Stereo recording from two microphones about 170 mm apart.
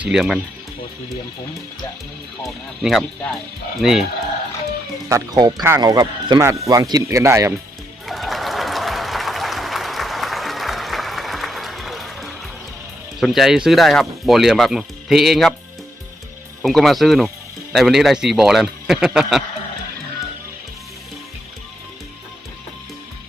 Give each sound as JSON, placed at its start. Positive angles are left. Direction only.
{"t": 0.0, "sound": "speech", "side_deg": 0}
{"t": 2.4, "sound": "speech", "side_deg": 0}
{"t": 5.0, "sound": "speech", "side_deg": -20}
{"t": 8.0, "sound": "applause", "side_deg": 0}
{"t": 13.1, "sound": "speech", "side_deg": 0}
{"t": 16.6, "sound": "speech", "side_deg": 0}